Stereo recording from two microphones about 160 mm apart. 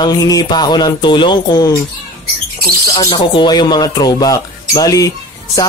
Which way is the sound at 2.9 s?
25° left (ahead or behind).